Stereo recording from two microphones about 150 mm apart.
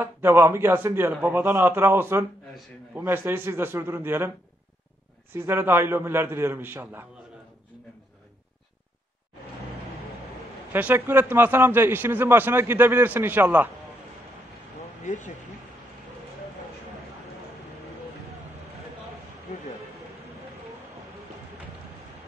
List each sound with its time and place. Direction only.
0.0 s a man's voice: 15° right (ahead or behind)
5.3 s a man's voice: 15° right (ahead or behind)
10.7 s a man's voice: 10° right (ahead or behind)
15.0 s speech: 55° left (ahead or behind)